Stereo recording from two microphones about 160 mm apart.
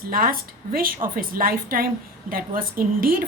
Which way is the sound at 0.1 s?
65° right (ahead or behind).